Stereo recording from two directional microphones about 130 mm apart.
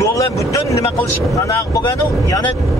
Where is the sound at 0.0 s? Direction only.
25° left (ahead or behind).